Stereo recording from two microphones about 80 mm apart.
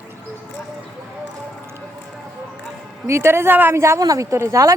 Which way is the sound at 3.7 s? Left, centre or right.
Right.